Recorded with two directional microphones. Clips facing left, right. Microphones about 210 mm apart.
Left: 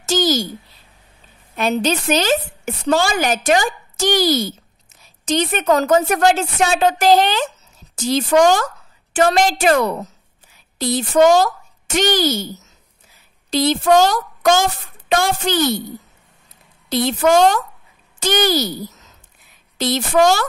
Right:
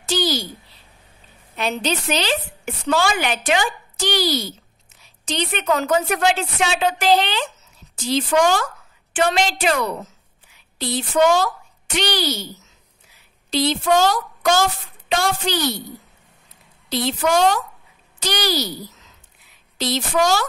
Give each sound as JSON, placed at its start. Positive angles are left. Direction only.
{"t": 0.0, "sound": "a sound", "side_deg": 45}
{"t": 1.6, "sound": "a woman's voice", "side_deg": 45}
{"t": 13.5, "sound": "speech", "side_deg": 45}
{"t": 16.9, "sound": "a woman's voice", "side_deg": 50}